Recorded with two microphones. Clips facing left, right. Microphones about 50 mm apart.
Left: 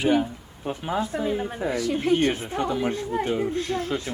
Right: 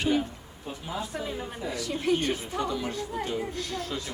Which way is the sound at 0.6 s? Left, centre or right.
Left.